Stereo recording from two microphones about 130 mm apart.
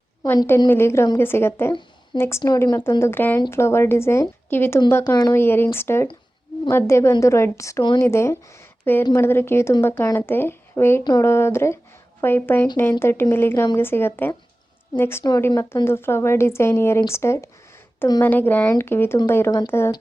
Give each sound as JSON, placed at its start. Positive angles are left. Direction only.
{"t": 0.2, "sound": "speech", "side_deg": 30}
{"t": 0.7, "sound": "a woman's voice", "side_deg": 20}
{"t": 2.4, "sound": "speech", "side_deg": 30}
{"t": 3.0, "sound": "a woman's voice", "side_deg": 15}